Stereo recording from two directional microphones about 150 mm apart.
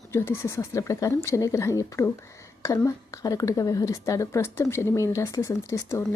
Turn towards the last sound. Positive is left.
turn(degrees=20)  # may be behind; listen again after turning